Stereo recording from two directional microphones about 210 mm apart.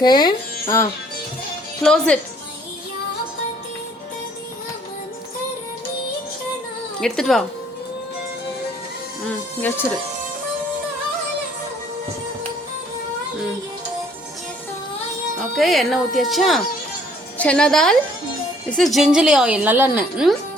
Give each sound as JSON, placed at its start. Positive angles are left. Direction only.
{"t": 0.0, "sound": "music", "side_deg": 20}
{"t": 1.8, "sound": "a woman's voice", "side_deg": 5}
{"t": 7.0, "sound": "a woman's voice", "side_deg": 0}
{"t": 9.2, "sound": "speech", "side_deg": 10}
{"t": 15.4, "sound": "a woman's voice", "side_deg": 0}